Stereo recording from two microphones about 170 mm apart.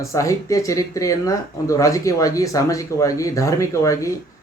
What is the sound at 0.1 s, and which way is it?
Speech, 20° left (ahead or behind).